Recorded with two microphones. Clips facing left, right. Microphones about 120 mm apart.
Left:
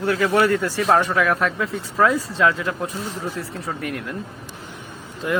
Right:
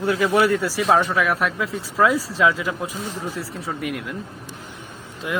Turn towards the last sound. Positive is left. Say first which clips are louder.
# left 3 dB
turn(degrees=-5)  # may be behind; listen again after turning